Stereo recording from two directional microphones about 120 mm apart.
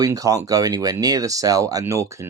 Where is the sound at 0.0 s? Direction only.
30° right (ahead or behind).